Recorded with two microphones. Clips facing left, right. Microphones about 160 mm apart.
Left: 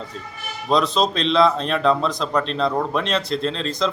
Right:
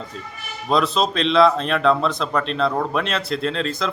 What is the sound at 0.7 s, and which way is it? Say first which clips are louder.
A man's voice: even; 5° right (ahead or behind).